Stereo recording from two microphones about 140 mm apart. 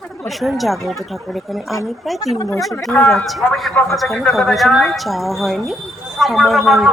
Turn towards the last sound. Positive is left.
turn(degrees=0)  # may be behind; listen again after turning